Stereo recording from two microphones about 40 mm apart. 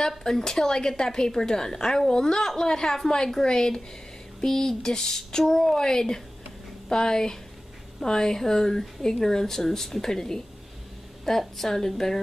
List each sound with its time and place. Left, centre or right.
0.2 s a woman's voice: centre